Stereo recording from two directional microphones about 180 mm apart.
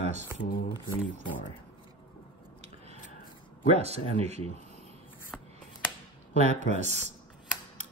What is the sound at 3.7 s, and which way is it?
Speech, 35° right (ahead or behind).